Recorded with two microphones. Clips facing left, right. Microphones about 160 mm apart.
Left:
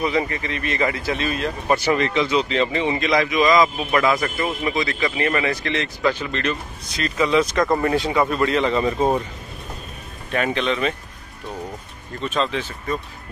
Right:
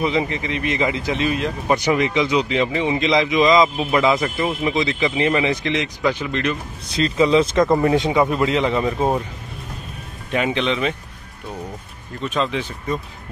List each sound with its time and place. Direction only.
0.0 s speech: 20° right (ahead or behind)
3.1 s speech: 20° right (ahead or behind)
7.0 s speech: 25° right (ahead or behind)
7.7 s speech: 15° right (ahead or behind)
10.3 s speech: 15° right (ahead or behind)
12.2 s speech: 10° right (ahead or behind)